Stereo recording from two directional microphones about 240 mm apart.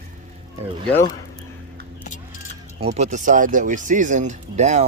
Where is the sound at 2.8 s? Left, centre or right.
Right.